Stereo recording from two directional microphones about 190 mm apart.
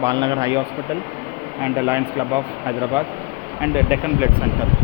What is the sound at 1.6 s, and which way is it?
Speech, 10° right (ahead or behind).